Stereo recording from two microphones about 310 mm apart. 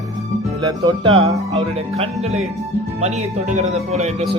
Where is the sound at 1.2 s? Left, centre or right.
Centre.